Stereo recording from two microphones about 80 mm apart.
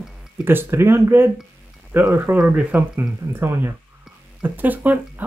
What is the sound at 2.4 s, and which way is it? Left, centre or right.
Speech, centre.